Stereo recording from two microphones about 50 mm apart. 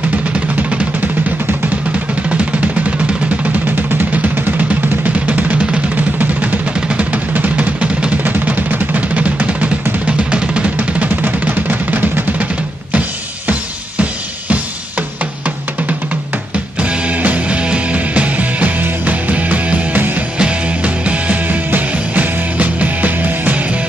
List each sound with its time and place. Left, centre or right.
0.1 s music: right
1.9 s music: right
3.6 s music: right
14.5 s drum: right
16.8 s music: right
20.0 s music: right
20.3 s music: right